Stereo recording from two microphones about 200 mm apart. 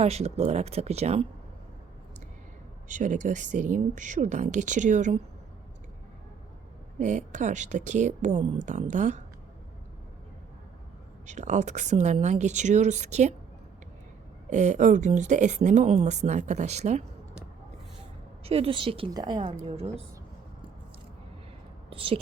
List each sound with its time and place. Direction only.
0.0 s speech: 30° right (ahead or behind)
2.9 s speech: 40° right (ahead or behind)
7.0 s speech: 40° right (ahead or behind)
11.3 s speech: 35° right (ahead or behind)
14.5 s speech: 35° right (ahead or behind)
18.4 s a woman's voice: 30° right (ahead or behind)
21.8 s a woman's voice: 25° right (ahead or behind)